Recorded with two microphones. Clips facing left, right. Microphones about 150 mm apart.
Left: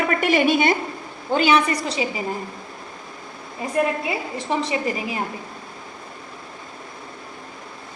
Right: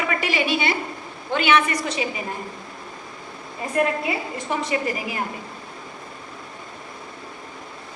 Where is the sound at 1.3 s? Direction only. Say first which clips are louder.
Left 2 dB; 35° left (ahead or behind).